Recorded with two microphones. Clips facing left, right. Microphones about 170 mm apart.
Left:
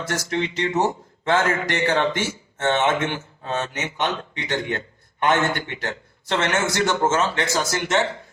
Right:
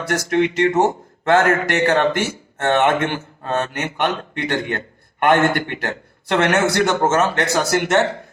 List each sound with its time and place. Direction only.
0.0 s a man's voice: 55° right (ahead or behind)